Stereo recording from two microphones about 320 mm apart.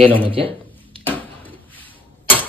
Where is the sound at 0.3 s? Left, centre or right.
Centre.